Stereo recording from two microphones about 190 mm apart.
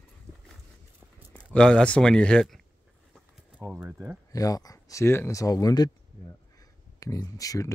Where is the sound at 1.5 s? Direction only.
5° left (ahead or behind).